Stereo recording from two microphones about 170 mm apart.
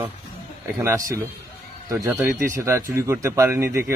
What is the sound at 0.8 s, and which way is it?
Speech, 15° right (ahead or behind).